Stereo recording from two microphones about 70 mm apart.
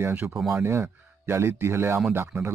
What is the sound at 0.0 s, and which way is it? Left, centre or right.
Speech, right.